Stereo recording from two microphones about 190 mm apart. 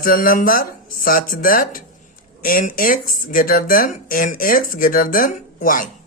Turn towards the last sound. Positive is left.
turn(degrees=45)  # may be behind; listen again after turning